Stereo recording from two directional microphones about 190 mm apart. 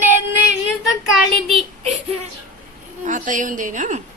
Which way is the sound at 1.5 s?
30° right (ahead or behind).